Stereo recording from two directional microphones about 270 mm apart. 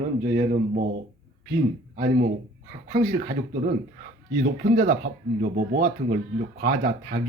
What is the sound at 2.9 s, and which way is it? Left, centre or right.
Speech, right.